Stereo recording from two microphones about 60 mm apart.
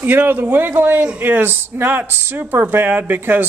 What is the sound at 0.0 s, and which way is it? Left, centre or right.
Speech, right.